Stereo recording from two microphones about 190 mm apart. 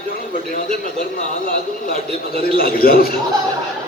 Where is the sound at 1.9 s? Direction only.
50° left (ahead or behind).